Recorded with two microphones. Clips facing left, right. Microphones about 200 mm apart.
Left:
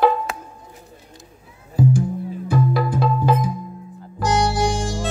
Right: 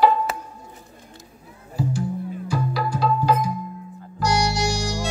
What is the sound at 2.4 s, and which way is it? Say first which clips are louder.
Music: left 6 dB; 55° left (ahead or behind).